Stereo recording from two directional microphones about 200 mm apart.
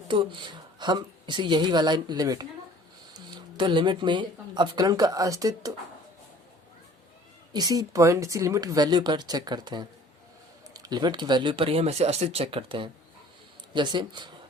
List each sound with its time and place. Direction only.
0.1 s a woman's voice: 25° right (ahead or behind)
7.5 s a woman's voice: 20° right (ahead or behind)